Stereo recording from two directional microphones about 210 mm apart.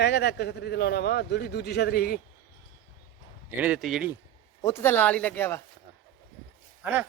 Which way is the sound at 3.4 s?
5° right (ahead or behind).